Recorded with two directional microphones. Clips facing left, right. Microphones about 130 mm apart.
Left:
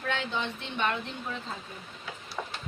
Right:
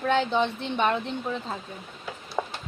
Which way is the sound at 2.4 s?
35° right (ahead or behind).